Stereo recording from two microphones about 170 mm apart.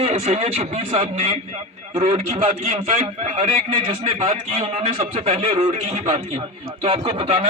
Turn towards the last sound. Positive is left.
turn(degrees=-30)  # may be behind; listen again after turning